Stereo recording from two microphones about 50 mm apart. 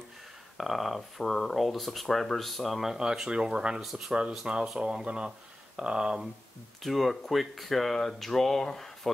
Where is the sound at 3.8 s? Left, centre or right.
Centre.